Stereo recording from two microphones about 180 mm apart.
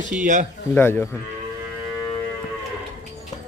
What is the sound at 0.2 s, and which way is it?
Speech, 45° right (ahead or behind).